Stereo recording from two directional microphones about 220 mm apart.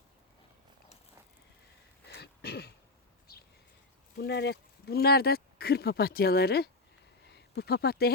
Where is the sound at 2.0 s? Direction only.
45° left (ahead or behind).